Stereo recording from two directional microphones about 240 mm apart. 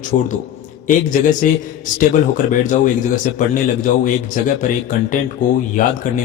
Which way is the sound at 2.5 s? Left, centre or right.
Left.